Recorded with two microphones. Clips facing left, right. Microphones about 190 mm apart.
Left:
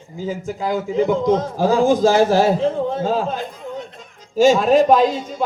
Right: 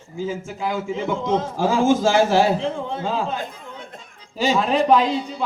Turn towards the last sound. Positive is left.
turn(degrees=45)  # may be behind; listen again after turning